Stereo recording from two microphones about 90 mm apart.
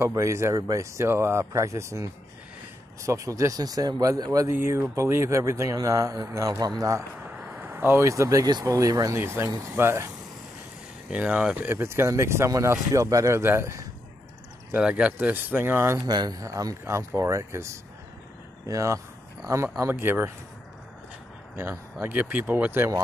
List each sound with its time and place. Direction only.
0.0 s speech: 35° right (ahead or behind)
4.5 s speech: 25° right (ahead or behind)
6.6 s a man's voice: 45° right (ahead or behind)
7.2 s speech: 15° right (ahead or behind)
11.1 s speech: 15° right (ahead or behind); by 13.8 s 30° right (ahead or behind)
14.8 s speech: 10° right (ahead or behind)
16.1 s speech: 50° right (ahead or behind); by 20.2 s 25° right (ahead or behind)
22.0 s speech: 15° right (ahead or behind)